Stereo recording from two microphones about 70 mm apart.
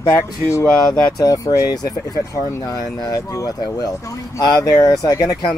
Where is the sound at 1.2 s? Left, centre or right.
Left.